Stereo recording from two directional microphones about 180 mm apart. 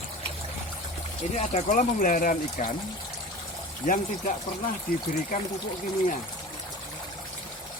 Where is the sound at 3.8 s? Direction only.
45° left (ahead or behind).